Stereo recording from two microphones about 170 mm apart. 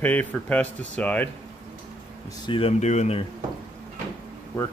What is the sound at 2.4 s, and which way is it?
Speech, 35° left (ahead or behind).